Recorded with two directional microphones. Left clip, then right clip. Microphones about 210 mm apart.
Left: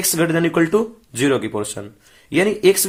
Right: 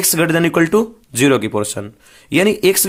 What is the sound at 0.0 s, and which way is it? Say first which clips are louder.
Speech: right 3 dB; 35° right (ahead or behind).